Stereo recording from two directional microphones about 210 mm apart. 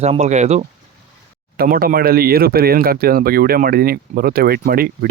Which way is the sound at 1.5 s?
45° right (ahead or behind).